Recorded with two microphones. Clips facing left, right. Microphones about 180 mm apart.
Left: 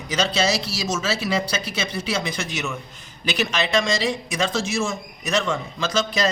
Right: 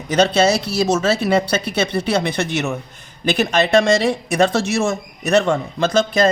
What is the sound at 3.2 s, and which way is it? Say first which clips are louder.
Speech: right 7 dB; 55° right (ahead or behind).